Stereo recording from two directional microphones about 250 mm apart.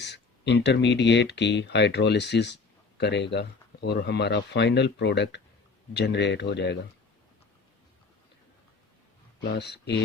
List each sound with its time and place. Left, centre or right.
0.0 s speech: left
9.4 s speech: left